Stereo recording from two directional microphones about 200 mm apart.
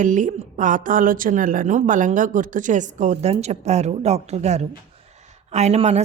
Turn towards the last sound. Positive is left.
turn(degrees=-35)  # may be behind; listen again after turning